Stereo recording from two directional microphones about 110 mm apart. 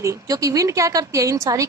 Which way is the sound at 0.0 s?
30° right (ahead or behind).